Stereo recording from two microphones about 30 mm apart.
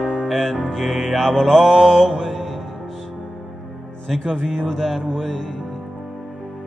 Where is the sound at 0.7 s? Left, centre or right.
Centre.